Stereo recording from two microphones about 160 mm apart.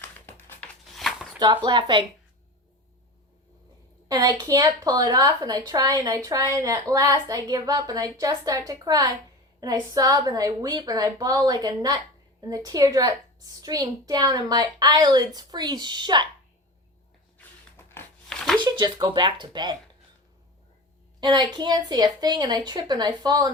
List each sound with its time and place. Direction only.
0.3 s a sound: 10° left (ahead or behind)
1.6 s a woman's voice: 30° right (ahead or behind)
4.1 s a woman's voice: 25° right (ahead or behind)
17.3 s a sound: 15° left (ahead or behind)
18.6 s a woman's voice: 25° right (ahead or behind)
21.2 s a woman's voice: 25° right (ahead or behind)